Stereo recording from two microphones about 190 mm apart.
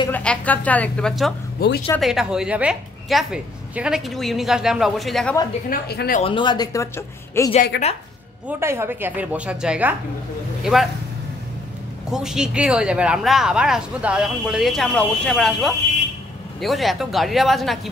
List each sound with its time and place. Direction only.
0.1 s speech: 5° left (ahead or behind)
1.6 s speech: 55° left (ahead or behind)
2.0 s speech: centre (ahead or behind)
5.7 s a woman's voice: 55° left (ahead or behind)
6.2 s speech: 25° left (ahead or behind)
7.7 s speech: 60° left (ahead or behind)
8.5 s a woman's voice: 15° right (ahead or behind)
12.1 s speech: 5° right (ahead or behind)